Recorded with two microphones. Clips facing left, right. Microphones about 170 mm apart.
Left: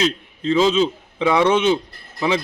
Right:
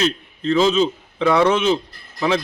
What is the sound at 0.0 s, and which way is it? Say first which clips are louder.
A man's voice: even; 15° left (ahead or behind).